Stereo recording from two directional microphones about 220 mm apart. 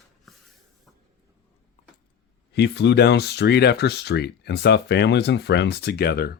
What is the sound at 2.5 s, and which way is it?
Speech, 50° left (ahead or behind).